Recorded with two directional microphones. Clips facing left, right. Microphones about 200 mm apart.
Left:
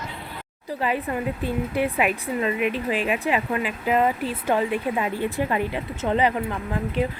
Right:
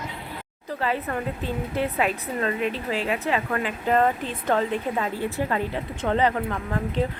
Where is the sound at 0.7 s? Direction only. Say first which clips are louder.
Left 1 dB; 15° left (ahead or behind).